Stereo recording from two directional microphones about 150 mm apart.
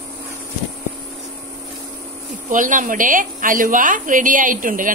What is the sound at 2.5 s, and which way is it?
A woman's voice, 60° right (ahead or behind).